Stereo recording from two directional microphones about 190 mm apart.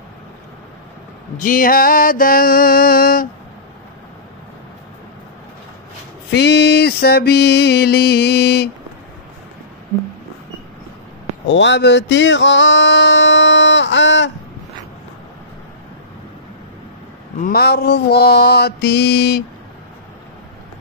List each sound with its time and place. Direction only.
1.4 s music: 45° left (ahead or behind)
6.3 s mantra: 60° left (ahead or behind)
11.4 s a sound: 70° left (ahead or behind)
17.4 s mantra: 55° left (ahead or behind)